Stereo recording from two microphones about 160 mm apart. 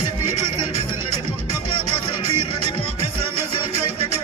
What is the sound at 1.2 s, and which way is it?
Music, 40° right (ahead or behind).